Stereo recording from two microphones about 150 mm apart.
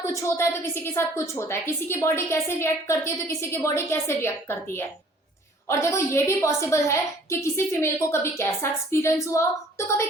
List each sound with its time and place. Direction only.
0.0 s a woman's voice: 20° left (ahead or behind)